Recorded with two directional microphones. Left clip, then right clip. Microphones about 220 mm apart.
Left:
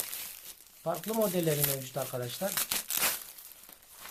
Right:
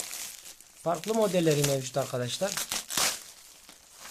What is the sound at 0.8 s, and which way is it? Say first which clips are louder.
Speech: right 4 dB; 45° right (ahead or behind).